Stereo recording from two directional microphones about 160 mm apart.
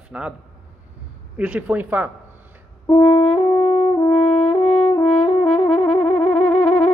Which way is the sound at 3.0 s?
30° left (ahead or behind).